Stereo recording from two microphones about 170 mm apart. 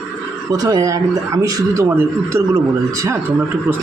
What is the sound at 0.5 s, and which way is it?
Speech, 20° right (ahead or behind).